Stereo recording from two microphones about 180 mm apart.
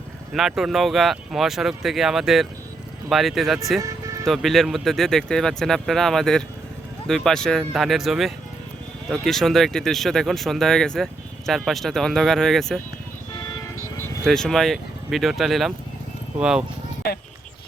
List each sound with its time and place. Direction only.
0.3 s speech: centre (ahead or behind)
3.8 s music: 15° right (ahead or behind)
4.3 s speech: centre (ahead or behind)
14.3 s speech: centre (ahead or behind)